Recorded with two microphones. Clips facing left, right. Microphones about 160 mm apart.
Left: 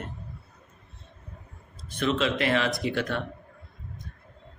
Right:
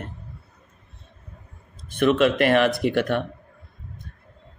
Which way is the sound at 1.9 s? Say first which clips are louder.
Right 7 dB; 60° right (ahead or behind).